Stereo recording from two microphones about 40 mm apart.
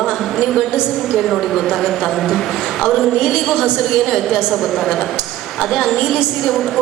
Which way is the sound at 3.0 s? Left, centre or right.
Centre.